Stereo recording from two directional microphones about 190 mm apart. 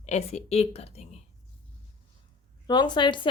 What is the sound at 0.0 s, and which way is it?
A woman's voice, 35° left (ahead or behind).